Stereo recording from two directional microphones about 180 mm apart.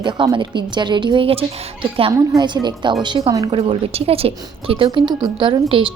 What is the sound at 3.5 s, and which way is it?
A woman's voice, 35° right (ahead or behind).